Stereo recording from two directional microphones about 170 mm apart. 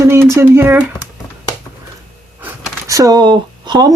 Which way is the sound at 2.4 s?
10° right (ahead or behind).